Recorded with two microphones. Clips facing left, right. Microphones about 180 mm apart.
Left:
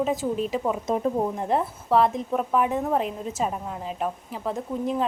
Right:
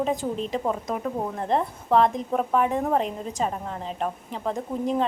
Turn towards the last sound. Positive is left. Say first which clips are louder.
# right 1 dB
turn(degrees=0)  # may be behind; listen again after turning